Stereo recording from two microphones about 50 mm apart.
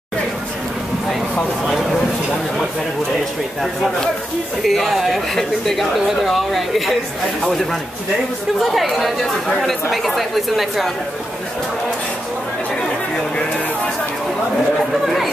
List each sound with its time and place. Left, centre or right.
4.6 s a woman's voice: centre
8.5 s a woman's voice: centre